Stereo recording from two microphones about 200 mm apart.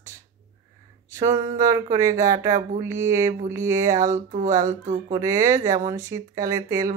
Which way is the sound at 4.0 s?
40° right (ahead or behind).